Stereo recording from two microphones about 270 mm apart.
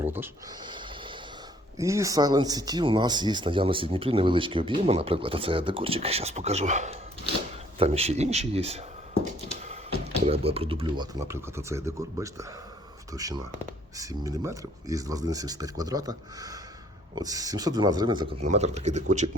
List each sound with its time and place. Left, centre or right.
0.0 s speech: centre
10.2 s speech: right